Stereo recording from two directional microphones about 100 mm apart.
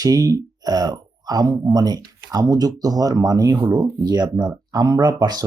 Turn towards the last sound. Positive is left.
turn(degrees=-45)  # may be behind; listen again after turning